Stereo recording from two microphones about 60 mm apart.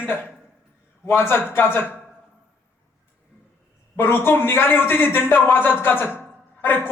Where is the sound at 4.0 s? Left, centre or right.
Left.